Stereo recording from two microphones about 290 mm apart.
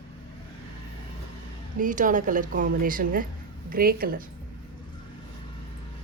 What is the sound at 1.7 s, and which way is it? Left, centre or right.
A woman's voice, right.